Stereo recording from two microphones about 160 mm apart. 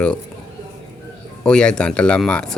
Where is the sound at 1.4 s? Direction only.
5° left (ahead or behind).